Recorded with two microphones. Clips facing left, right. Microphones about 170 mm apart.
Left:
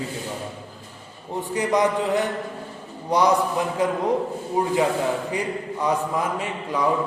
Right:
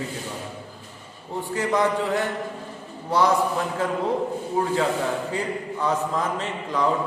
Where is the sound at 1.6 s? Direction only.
15° left (ahead or behind).